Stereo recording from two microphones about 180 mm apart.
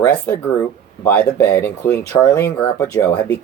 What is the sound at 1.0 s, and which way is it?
Speech, 10° left (ahead or behind).